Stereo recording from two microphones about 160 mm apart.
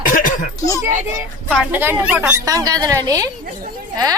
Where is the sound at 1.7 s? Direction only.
10° right (ahead or behind).